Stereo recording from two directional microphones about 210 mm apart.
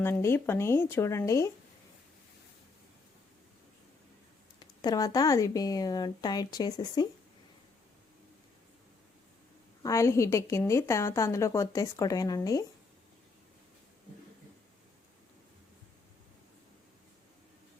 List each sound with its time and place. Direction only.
0.0 s a woman's voice: 10° left (ahead or behind)
4.8 s a woman's voice: 15° left (ahead or behind)
9.8 s a woman's voice: 15° left (ahead or behind)